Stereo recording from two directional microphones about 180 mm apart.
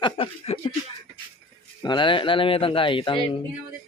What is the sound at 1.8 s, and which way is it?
Speech, 25° left (ahead or behind).